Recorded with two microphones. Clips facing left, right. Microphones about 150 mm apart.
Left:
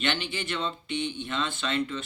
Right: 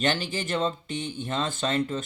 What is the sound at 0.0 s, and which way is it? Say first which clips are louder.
A man's voice: right 3 dB; 40° right (ahead or behind).